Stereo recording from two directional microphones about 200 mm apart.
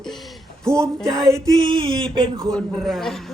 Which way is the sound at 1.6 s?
25° right (ahead or behind).